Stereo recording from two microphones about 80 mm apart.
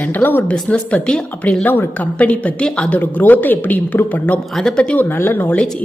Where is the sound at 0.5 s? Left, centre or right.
Centre.